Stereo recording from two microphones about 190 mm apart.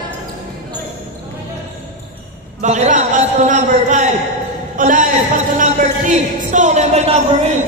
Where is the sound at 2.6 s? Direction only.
40° right (ahead or behind).